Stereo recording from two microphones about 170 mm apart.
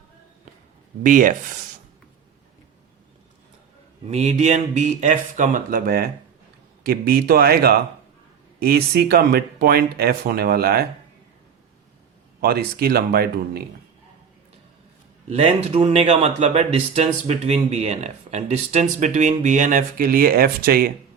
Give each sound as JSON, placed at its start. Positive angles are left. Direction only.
{"t": 1.0, "sound": "speech", "side_deg": -50}
{"t": 4.1, "sound": "speech", "side_deg": -40}
{"t": 12.4, "sound": "speech", "side_deg": -65}
{"t": 15.3, "sound": "speech", "side_deg": -40}